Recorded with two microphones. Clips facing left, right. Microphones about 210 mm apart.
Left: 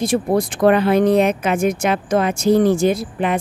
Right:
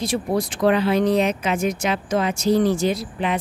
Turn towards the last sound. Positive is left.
turn(degrees=50)  # may be behind; listen again after turning